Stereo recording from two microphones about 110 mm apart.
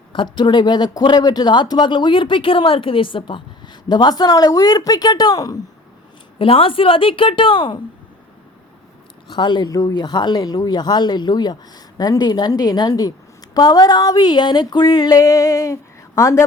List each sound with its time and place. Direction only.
0.1 s speech: 45° left (ahead or behind)
6.4 s a woman's voice: 55° left (ahead or behind)
9.3 s speech: 45° left (ahead or behind); by 16.5 s 25° left (ahead or behind)